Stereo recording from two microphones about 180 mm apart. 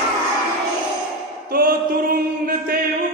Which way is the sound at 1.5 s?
55° right (ahead or behind).